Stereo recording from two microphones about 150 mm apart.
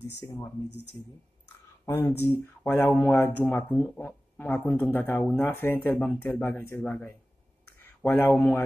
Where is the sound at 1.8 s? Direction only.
15° left (ahead or behind).